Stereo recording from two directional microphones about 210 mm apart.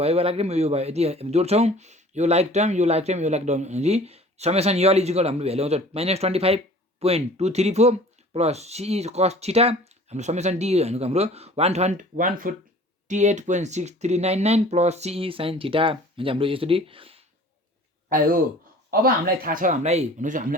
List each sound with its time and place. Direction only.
0.0 s speech: 30° right (ahead or behind)
18.9 s speech: 45° right (ahead or behind)